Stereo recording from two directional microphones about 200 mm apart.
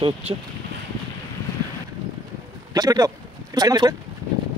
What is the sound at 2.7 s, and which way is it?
Speech, 20° right (ahead or behind).